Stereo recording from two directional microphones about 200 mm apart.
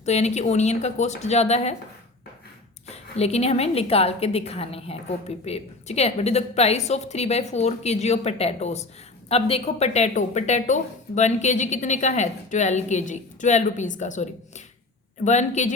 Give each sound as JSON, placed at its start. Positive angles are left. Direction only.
{"t": 0.0, "sound": "a woman's voice", "side_deg": 35}
{"t": 2.8, "sound": "a woman's voice", "side_deg": 30}